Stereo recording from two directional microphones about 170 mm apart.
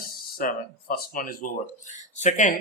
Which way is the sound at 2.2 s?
45° left (ahead or behind).